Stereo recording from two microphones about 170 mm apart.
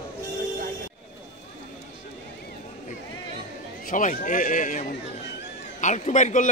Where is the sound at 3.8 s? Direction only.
50° left (ahead or behind).